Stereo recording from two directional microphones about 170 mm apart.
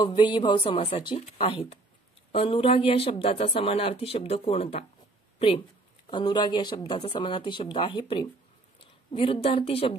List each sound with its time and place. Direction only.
0.0 s speech: 30° left (ahead or behind)
6.0 s speech: 25° left (ahead or behind)